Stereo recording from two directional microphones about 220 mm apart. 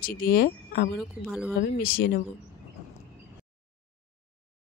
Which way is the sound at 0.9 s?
Centre (ahead or behind).